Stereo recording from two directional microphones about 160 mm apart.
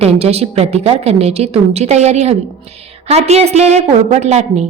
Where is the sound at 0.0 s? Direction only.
40° right (ahead or behind).